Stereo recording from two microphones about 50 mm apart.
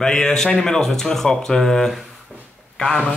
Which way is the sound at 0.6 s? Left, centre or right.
Centre.